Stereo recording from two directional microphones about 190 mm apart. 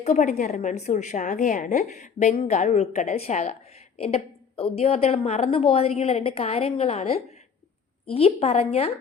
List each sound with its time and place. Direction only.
0.0 s a woman's voice: 40° left (ahead or behind)